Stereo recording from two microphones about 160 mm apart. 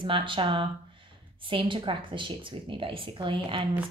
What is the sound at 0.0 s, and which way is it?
A woman's voice, 30° right (ahead or behind).